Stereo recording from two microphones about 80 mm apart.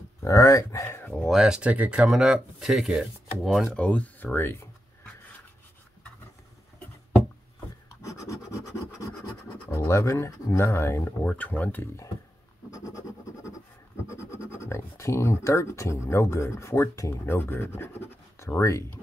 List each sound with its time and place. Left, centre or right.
0.2 s speech: left
1.2 s speech: centre
3.7 s speech: centre
8.2 s rub: left
9.7 s speech: left
12.7 s a sound: left
14.1 s speech: left
17.3 s speech: left